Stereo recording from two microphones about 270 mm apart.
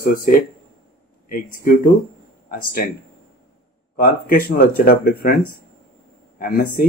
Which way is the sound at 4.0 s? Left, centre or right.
Left.